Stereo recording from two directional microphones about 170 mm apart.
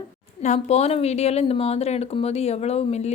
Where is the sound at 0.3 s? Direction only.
40° left (ahead or behind).